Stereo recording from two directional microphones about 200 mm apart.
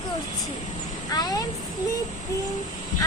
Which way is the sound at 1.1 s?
20° left (ahead or behind).